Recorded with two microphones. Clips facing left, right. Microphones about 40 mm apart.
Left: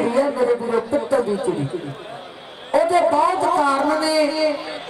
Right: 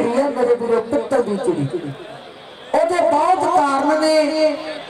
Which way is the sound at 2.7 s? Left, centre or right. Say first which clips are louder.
Right 1 dB; centre.